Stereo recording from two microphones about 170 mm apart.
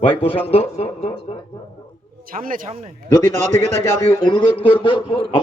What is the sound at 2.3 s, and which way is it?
Speech, 55° right (ahead or behind).